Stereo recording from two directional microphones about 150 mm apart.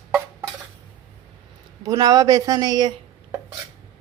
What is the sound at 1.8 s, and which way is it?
A woman's voice, 25° right (ahead or behind).